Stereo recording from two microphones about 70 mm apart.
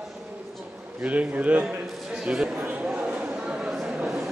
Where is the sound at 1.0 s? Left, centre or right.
Centre.